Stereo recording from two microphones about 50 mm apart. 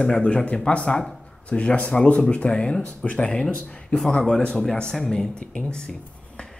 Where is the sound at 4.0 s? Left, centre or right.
Centre.